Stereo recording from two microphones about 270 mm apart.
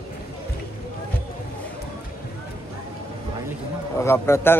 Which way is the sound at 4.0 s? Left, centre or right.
Centre.